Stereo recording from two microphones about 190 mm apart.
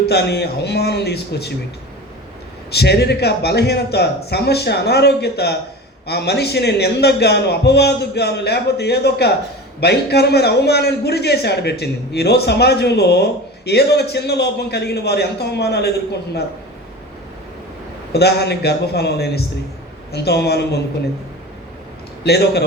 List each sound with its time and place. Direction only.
0.0 s a man's voice: 60° left (ahead or behind)
2.7 s a man's voice: 60° left (ahead or behind)
18.1 s a man's voice: 60° left (ahead or behind)
22.2 s a man's voice: 60° left (ahead or behind)